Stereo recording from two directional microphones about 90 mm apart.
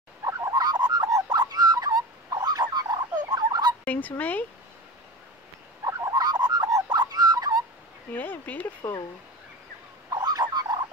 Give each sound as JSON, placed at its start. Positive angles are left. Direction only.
{"t": 0.2, "sound": "fowl", "side_deg": -40}
{"t": 3.8, "sound": "fowl", "side_deg": 15}
{"t": 5.9, "sound": "fowl", "side_deg": -40}
{"t": 8.1, "sound": "fowl", "side_deg": 20}
{"t": 10.2, "sound": "a sound", "side_deg": -50}